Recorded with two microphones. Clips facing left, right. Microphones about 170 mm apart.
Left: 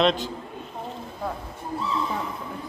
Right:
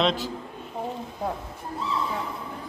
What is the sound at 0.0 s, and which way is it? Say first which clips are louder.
Speech: left 3 dB; 5° right (ahead or behind).